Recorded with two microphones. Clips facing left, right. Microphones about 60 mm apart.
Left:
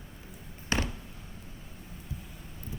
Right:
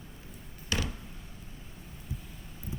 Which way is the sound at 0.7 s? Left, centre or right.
Left.